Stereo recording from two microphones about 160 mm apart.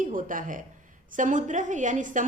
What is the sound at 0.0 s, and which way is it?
A woman's voice, 55° right (ahead or behind).